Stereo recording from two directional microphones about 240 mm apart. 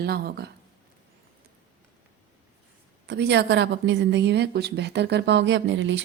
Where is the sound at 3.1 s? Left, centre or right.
Right.